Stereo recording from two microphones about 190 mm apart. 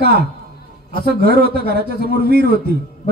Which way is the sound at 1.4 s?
55° right (ahead or behind).